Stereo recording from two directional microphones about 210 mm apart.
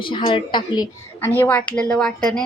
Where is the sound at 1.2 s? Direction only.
10° left (ahead or behind).